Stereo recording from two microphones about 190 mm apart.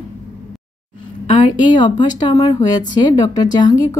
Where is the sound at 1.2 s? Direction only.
25° left (ahead or behind).